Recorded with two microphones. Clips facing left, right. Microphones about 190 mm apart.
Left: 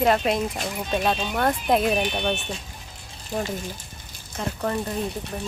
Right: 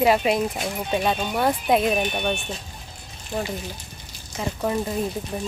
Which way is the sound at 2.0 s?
10° right (ahead or behind).